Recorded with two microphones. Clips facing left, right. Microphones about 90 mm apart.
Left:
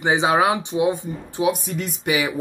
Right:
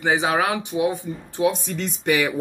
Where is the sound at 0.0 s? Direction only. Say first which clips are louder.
Left 3 dB; 20° left (ahead or behind).